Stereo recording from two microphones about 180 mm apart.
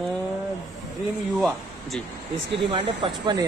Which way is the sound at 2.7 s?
25° right (ahead or behind).